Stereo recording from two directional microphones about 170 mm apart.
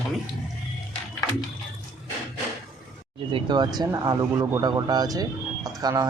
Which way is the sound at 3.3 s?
25° right (ahead or behind).